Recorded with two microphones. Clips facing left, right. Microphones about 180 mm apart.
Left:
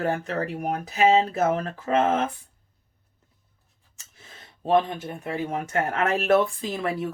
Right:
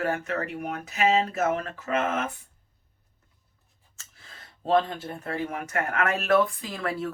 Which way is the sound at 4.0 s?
20° left (ahead or behind).